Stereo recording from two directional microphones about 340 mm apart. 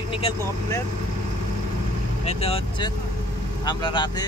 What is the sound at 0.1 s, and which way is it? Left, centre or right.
Speech, centre.